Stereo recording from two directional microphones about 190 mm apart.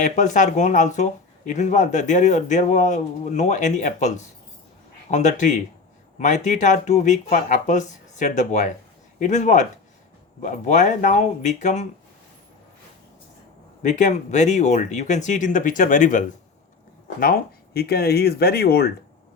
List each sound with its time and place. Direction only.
0.0 s speech: 40° left (ahead or behind)
13.8 s speech: 40° left (ahead or behind)